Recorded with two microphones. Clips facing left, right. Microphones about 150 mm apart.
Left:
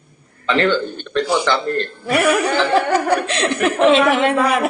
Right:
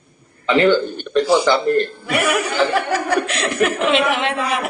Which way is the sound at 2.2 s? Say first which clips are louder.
Left 2 dB; 30° left (ahead or behind).